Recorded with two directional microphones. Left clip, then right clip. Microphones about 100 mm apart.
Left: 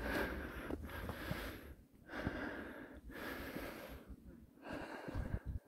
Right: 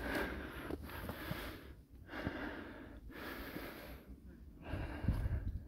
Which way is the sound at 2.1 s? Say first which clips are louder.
Even; 5° right (ahead or behind).